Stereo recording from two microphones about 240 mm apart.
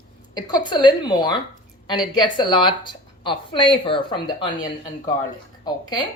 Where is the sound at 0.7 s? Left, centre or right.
Centre.